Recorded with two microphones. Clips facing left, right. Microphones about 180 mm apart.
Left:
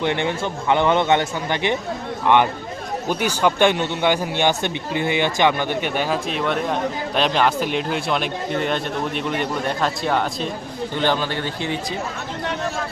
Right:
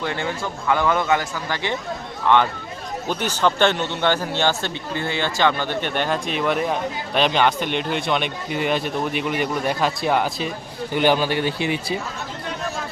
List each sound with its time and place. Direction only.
0.0 s a man's voice: 20° left (ahead or behind); by 11.9 s 15° right (ahead or behind)